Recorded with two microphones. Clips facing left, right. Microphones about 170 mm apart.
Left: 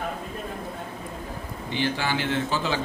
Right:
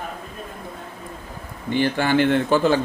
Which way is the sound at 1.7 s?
50° right (ahead or behind).